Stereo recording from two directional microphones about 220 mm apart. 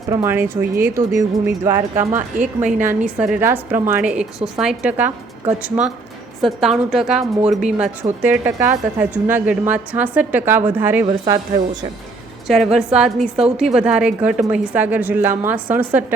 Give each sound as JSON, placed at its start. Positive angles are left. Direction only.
{"t": 0.1, "sound": "a woman's voice", "side_deg": -10}
{"t": 2.4, "sound": "a woman's voice", "side_deg": -35}
{"t": 2.7, "sound": "a woman's voice", "side_deg": -5}
{"t": 12.5, "sound": "a woman's voice", "side_deg": 0}